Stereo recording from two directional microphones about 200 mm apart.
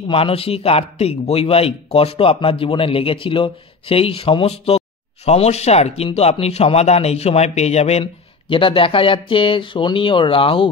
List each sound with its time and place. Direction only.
0.1 s speech: 30° left (ahead or behind)